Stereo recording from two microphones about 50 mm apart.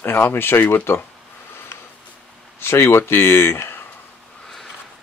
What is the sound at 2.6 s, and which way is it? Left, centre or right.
Speech, left.